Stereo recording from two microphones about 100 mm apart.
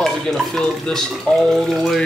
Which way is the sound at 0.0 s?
5° left (ahead or behind).